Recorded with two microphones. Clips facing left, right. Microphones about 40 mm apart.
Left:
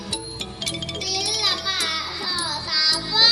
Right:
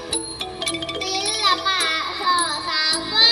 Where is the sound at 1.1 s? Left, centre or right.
Centre.